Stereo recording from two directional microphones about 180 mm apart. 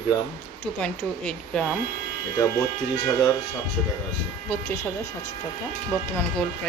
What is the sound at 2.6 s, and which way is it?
Speech, 20° left (ahead or behind).